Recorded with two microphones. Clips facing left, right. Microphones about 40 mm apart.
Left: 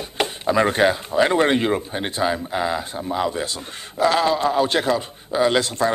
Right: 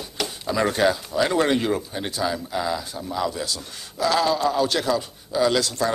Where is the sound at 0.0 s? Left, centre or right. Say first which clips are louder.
Left 6 dB; left.